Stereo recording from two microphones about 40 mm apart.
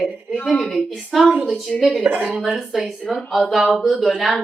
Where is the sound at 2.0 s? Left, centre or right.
Right.